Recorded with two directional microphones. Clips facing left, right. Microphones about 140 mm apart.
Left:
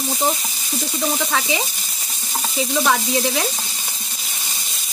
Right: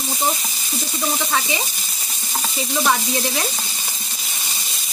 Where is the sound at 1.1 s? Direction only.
90° left.